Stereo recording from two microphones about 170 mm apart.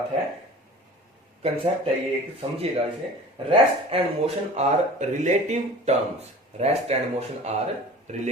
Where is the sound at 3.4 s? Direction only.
30° right (ahead or behind).